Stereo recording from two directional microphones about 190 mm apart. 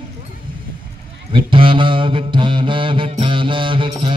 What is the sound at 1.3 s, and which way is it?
Mantra, 25° right (ahead or behind).